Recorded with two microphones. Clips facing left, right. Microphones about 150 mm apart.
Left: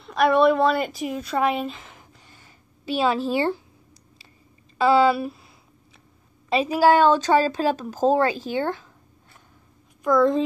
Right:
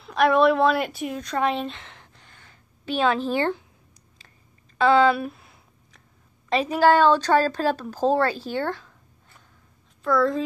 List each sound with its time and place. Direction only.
0.0 s a woman's voice: centre (ahead or behind)
4.7 s speech: 5° left (ahead or behind)
6.5 s speech: 5° left (ahead or behind)
10.0 s a child's voice: 20° left (ahead or behind)